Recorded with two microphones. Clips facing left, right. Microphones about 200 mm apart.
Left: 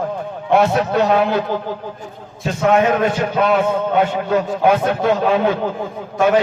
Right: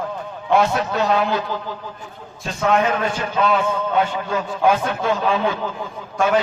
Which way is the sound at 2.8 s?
55° left (ahead or behind).